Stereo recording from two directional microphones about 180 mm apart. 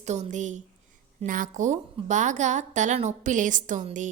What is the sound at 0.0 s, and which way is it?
A woman's voice, 40° right (ahead or behind).